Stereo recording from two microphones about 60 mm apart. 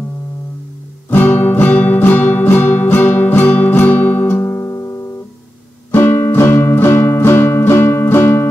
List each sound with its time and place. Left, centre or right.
1.1 s music: left